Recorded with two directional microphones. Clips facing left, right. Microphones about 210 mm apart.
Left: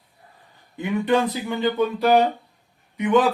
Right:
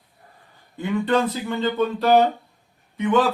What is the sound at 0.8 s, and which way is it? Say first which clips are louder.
Speech: even; 15° left (ahead or behind).